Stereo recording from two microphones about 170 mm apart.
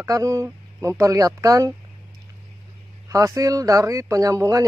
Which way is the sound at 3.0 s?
20° right (ahead or behind).